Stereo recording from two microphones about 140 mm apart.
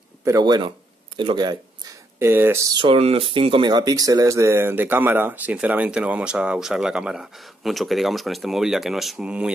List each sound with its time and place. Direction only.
0.2 s speech: 25° right (ahead or behind)
2.1 s speech: 20° right (ahead or behind)
2.7 s speech: 40° right (ahead or behind); by 9.5 s 5° right (ahead or behind)